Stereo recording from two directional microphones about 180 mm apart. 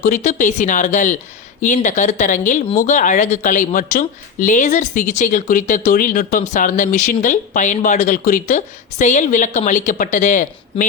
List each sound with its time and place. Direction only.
0.0 s speech: 45° left (ahead or behind)